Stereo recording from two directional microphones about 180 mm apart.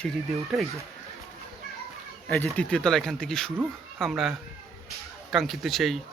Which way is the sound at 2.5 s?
5° left (ahead or behind).